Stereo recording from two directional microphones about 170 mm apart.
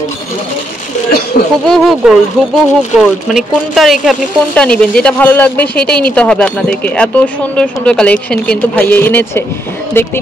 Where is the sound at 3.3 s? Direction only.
Centre (ahead or behind).